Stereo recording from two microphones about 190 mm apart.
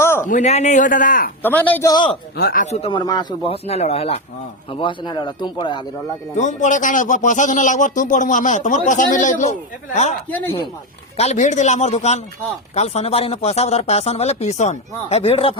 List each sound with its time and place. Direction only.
0.0 s a sound: 15° left (ahead or behind)
0.3 s a man's voice: 40° left (ahead or behind)
1.4 s a man's voice: 10° left (ahead or behind)
1.9 s a man's voice: 25° left (ahead or behind)
2.3 s a man's voice: 55° left (ahead or behind); by 3.0 s 35° left (ahead or behind)
3.1 s a man's voice: 20° left (ahead or behind)
6.3 s a man's voice: 40° left (ahead or behind)
11.2 s a man's voice: 35° left (ahead or behind)